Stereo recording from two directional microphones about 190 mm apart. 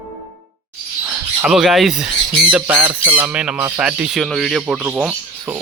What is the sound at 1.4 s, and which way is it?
Speech, centre (ahead or behind).